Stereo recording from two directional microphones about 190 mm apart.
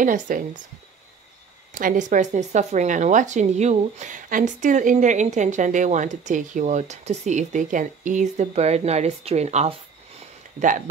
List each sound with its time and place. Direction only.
0.0 s speech: 45° right (ahead or behind)
1.7 s speech: 45° right (ahead or behind)